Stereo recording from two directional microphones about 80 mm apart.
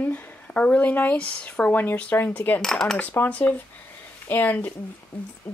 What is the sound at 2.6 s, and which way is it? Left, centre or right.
Speech, centre.